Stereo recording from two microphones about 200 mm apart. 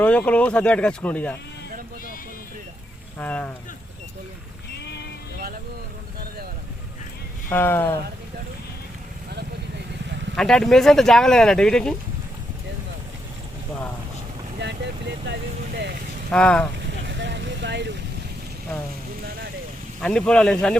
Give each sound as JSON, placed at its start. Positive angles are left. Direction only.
{"t": 0.0, "sound": "speech", "side_deg": 5}
{"t": 3.2, "sound": "speech", "side_deg": 10}
{"t": 7.5, "sound": "speech", "side_deg": 10}
{"t": 9.3, "sound": "vehicle", "side_deg": -60}
{"t": 10.3, "sound": "speech", "side_deg": 5}
{"t": 14.6, "sound": "vehicle", "side_deg": -60}
{"t": 16.3, "sound": "speech", "side_deg": 5}
{"t": 16.8, "sound": "vehicle", "side_deg": -60}
{"t": 20.0, "sound": "speech", "side_deg": 5}